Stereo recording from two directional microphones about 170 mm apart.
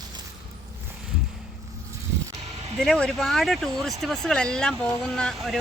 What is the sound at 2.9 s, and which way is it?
Speech, 5° left (ahead or behind).